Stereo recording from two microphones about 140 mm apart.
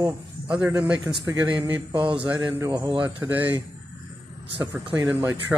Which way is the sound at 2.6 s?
30° right (ahead or behind).